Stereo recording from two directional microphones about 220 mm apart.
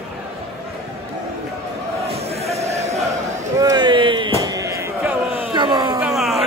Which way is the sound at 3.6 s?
20° right (ahead or behind).